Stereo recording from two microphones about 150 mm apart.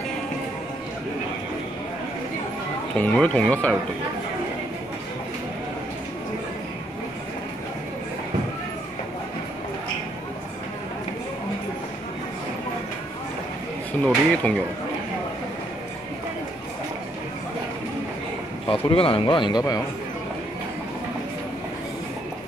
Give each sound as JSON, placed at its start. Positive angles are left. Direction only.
{"t": 3.0, "sound": "speech", "side_deg": 5}
{"t": 14.0, "sound": "speech", "side_deg": 5}
{"t": 18.7, "sound": "speech", "side_deg": 35}